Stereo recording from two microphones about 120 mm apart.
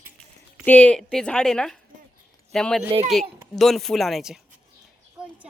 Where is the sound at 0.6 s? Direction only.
15° left (ahead or behind).